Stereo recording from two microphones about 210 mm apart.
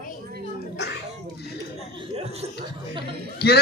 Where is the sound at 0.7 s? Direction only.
50° left (ahead or behind).